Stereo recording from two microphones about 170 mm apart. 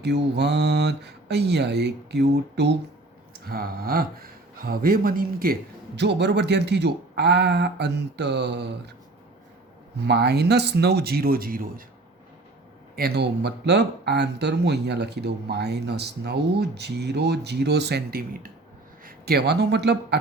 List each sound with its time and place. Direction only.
0.0 s speech: 85° right
3.3 s speech: 65° right (ahead or behind)
6.0 s speech: 85° right
10.1 s speech: 75° right (ahead or behind); by 11.7 s 55° right (ahead or behind)
13.0 s speech: 70° right (ahead or behind)